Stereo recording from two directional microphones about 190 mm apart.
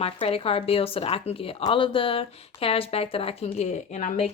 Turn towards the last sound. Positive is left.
turn(degrees=35)  # may be behind; listen again after turning